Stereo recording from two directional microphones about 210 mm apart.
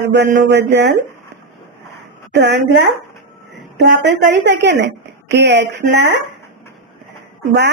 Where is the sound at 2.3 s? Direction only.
55° right (ahead or behind).